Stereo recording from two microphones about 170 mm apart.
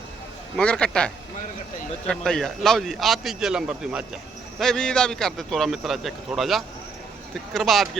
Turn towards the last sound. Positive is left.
turn(degrees=0)  # may be behind; listen again after turning